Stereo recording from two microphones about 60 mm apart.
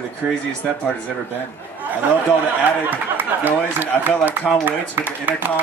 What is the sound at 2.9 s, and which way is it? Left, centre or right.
Speech, right.